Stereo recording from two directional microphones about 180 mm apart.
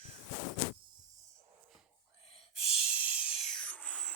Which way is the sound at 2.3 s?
35° left (ahead or behind).